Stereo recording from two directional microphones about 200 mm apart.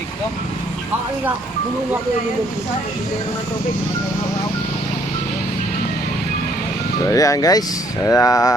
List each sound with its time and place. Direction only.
7.0 s speech: 15° left (ahead or behind)